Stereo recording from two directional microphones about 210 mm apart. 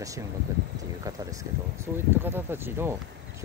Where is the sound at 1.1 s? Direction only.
15° right (ahead or behind).